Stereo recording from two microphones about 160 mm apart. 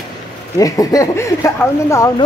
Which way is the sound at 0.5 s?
20° left (ahead or behind).